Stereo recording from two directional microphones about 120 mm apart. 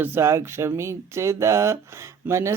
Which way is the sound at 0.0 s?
20° right (ahead or behind).